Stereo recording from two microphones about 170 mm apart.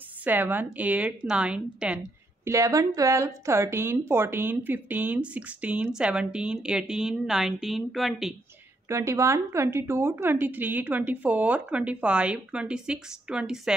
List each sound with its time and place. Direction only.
0.2 s a woman's voice: 10° right (ahead or behind)
2.4 s a woman's voice: 20° right (ahead or behind); by 8.4 s centre (ahead or behind)
8.8 s a woman's voice: 15° right (ahead or behind)